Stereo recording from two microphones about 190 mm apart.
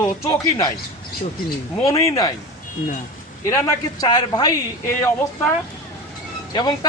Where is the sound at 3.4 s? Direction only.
15° left (ahead or behind).